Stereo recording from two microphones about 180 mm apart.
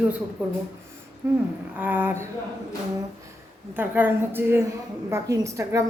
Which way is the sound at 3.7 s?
10° right (ahead or behind).